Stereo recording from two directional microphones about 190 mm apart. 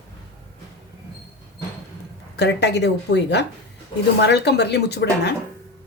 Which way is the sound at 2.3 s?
65° left (ahead or behind).